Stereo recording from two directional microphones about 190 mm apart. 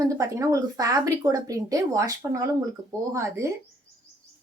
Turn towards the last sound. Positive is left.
turn(degrees=-15)  # may be behind; listen again after turning